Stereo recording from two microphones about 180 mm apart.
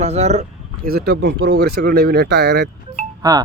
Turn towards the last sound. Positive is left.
turn(degrees=-20)  # may be behind; listen again after turning